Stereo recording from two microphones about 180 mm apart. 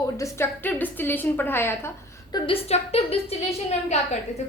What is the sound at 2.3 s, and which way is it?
A woman's voice, 35° left (ahead or behind).